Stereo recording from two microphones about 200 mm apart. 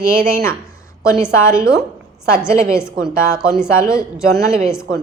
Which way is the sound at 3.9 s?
5° right (ahead or behind).